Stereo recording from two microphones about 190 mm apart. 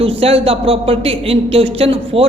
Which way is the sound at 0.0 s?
30° right (ahead or behind).